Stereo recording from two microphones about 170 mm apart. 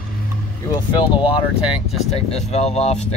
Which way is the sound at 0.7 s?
25° left (ahead or behind).